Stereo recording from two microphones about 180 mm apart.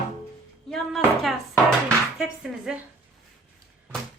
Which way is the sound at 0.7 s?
Centre (ahead or behind).